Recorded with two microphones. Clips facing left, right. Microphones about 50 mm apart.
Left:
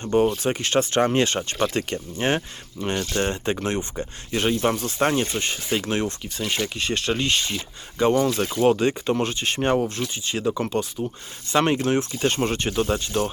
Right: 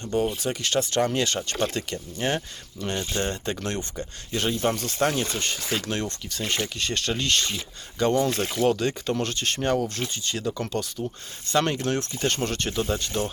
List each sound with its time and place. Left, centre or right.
0.0 s a sound: left
0.3 s speech: left
4.3 s speech: left
5.3 s speech: centre
9.6 s speech: left
12.7 s speech: left